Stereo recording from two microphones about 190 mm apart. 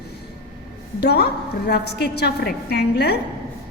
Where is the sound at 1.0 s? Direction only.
60° left (ahead or behind).